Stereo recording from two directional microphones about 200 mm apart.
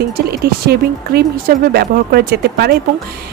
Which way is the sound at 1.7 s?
50° right (ahead or behind).